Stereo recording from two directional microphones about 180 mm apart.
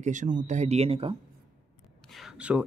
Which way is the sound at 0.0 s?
45° right (ahead or behind).